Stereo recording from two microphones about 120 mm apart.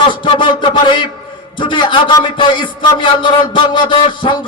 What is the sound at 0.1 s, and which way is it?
A man's voice, 45° left (ahead or behind).